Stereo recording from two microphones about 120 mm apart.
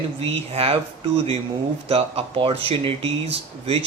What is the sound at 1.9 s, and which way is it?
Speech, 50° right (ahead or behind).